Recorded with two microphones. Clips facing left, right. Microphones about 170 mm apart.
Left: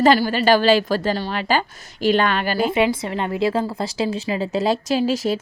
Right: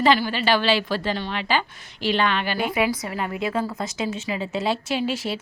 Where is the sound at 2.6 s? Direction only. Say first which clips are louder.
Left 5 dB; 25° left (ahead or behind).